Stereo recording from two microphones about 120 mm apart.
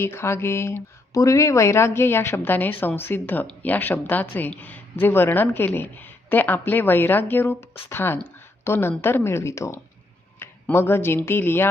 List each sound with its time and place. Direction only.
0.0 s speech: 20° left (ahead or behind)